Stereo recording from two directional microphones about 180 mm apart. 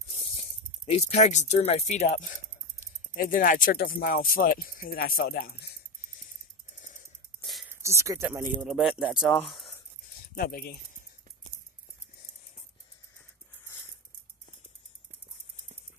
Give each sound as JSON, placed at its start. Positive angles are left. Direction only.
{"t": 0.8, "sound": "speech", "side_deg": 35}
{"t": 6.8, "sound": "wheeze", "side_deg": 45}
{"t": 7.7, "sound": "speech", "side_deg": -15}
{"t": 8.5, "sound": "speech", "side_deg": 0}
{"t": 10.3, "sound": "speech", "side_deg": 55}